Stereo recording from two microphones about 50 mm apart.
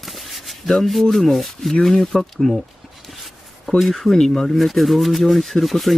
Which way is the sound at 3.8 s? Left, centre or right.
Centre.